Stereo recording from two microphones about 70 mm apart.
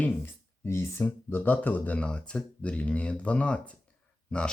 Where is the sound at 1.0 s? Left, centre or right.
Left.